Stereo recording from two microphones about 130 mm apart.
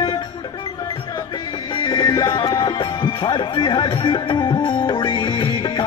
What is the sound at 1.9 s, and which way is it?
Speech, 35° left (ahead or behind).